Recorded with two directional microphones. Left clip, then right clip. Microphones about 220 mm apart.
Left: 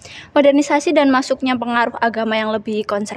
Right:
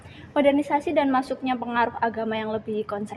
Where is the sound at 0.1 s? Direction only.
55° left (ahead or behind).